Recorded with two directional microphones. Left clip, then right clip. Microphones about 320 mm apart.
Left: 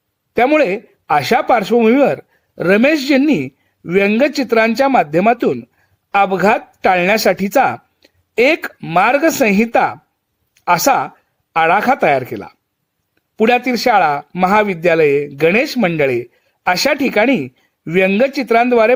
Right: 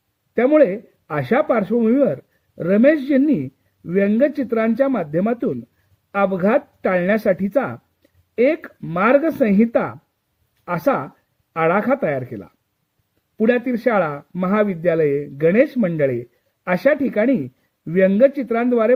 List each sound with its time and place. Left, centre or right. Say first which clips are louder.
0.3 s speech: left 2 dB; centre